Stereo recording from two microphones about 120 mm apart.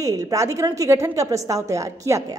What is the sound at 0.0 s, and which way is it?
A woman's voice, 25° right (ahead or behind).